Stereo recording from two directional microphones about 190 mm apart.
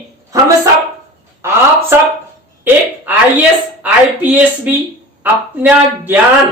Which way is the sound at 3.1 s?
10° right (ahead or behind).